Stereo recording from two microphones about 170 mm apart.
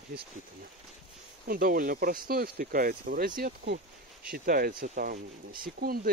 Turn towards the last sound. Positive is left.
turn(degrees=-60)  # may be behind; listen again after turning